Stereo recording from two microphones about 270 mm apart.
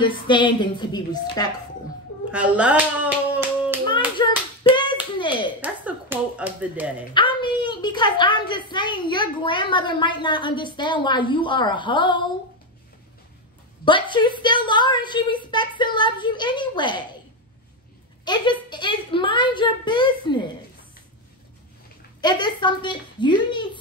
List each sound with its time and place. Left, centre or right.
0.0 s a woman's voice: centre
2.3 s speech: centre
3.3 s hands: centre
4.2 s hands: centre
5.1 s finger snapping: centre
5.6 s speech: centre
7.2 s a woman's voice: centre
13.8 s a woman's voice: centre
18.2 s a woman's voice: centre
22.2 s a woman's voice: centre